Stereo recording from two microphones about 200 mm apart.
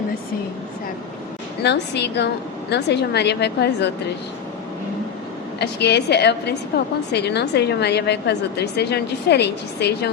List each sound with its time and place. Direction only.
1.6 s a woman's voice: 60° left (ahead or behind)
5.5 s a woman's voice: 55° left (ahead or behind)